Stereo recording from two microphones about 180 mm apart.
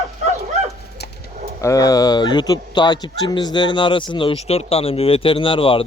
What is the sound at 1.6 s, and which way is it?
Speech, 20° left (ahead or behind).